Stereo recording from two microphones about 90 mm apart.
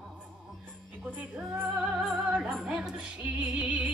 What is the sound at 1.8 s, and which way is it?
Music, centre (ahead or behind).